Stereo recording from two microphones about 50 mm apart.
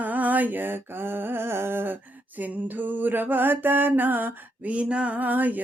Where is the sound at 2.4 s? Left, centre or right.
Right.